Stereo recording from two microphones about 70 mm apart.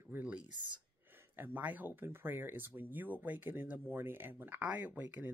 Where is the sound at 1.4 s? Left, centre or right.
Right.